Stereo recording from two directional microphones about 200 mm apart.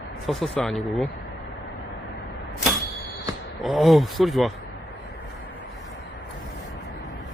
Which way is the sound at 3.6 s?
Centre (ahead or behind).